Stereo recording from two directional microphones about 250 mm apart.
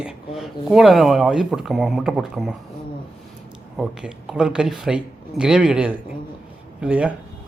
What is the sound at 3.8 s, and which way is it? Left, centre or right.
Speech, centre.